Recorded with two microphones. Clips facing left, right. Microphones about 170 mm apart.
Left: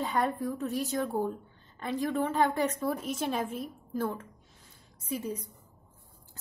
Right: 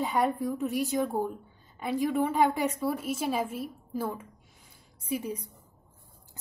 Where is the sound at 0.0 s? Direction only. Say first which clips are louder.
Right 2 dB; 10° right (ahead or behind).